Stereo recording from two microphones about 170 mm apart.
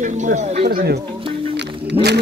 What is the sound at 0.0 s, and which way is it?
Speech, 45° right (ahead or behind).